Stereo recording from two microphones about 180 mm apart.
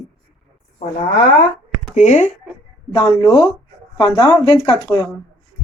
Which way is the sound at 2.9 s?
25° left (ahead or behind).